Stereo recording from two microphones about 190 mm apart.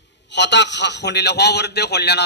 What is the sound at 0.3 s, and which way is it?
A man's voice, 65° left (ahead or behind).